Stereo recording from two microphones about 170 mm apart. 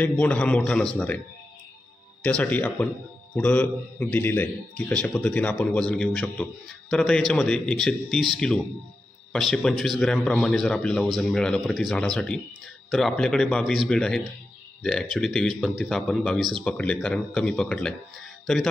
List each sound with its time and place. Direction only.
0.0 s a man's voice: 10° left (ahead or behind)
2.2 s a man's voice: 10° left (ahead or behind)
9.3 s a man's voice: centre (ahead or behind)